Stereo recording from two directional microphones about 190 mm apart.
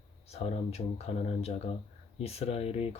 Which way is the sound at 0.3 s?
35° left (ahead or behind).